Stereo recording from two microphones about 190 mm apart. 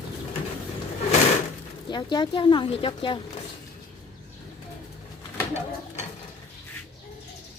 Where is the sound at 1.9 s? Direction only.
25° left (ahead or behind).